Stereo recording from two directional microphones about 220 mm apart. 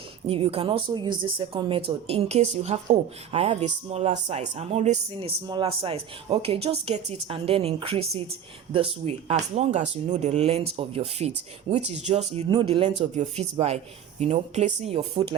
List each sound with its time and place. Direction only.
0.3 s speech: 25° right (ahead or behind)
12.4 s speech: 25° right (ahead or behind)